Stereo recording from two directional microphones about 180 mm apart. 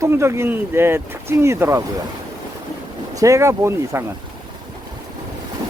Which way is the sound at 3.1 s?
15° right (ahead or behind).